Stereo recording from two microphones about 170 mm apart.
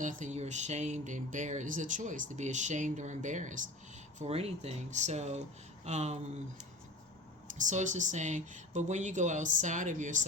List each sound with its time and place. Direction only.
0.0 s speech: 45° right (ahead or behind)
4.2 s speech: 35° right (ahead or behind)
7.6 s speech: 45° right (ahead or behind)